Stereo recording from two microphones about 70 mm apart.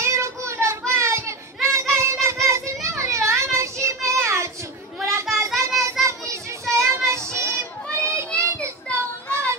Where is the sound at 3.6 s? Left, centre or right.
Right.